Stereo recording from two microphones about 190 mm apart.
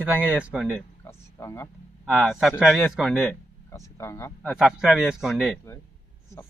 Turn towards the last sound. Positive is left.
turn(degrees=0)  # may be behind; listen again after turning